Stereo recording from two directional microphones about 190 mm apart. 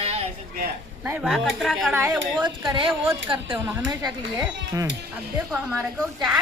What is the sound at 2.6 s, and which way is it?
Speech, 25° right (ahead or behind).